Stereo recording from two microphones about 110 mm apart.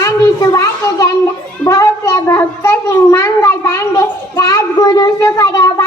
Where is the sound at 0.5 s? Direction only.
30° left (ahead or behind).